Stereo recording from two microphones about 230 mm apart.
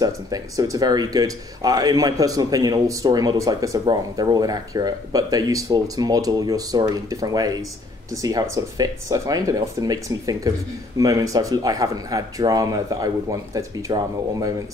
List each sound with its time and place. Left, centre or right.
0.0 s speech: centre